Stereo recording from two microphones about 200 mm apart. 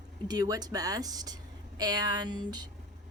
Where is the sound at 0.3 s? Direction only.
20° right (ahead or behind).